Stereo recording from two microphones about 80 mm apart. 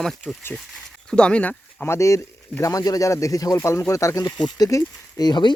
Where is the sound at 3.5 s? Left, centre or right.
Left.